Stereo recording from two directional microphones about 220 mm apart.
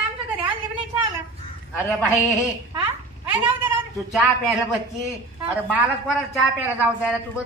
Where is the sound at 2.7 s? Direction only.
10° right (ahead or behind).